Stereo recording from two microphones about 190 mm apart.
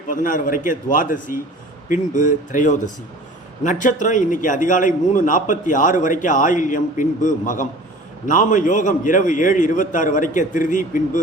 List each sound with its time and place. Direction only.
0.1 s a man's voice: 45° left (ahead or behind)